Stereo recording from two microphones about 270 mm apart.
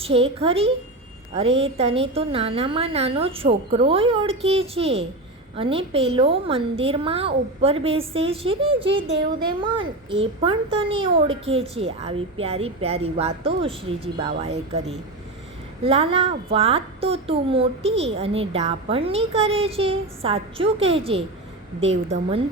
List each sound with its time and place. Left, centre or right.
0.0 s a woman's voice: right